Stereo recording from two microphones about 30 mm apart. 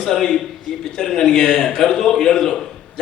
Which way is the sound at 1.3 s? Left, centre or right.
Centre.